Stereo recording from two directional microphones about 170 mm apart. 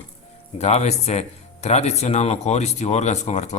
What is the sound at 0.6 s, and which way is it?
A man's voice, 40° left (ahead or behind).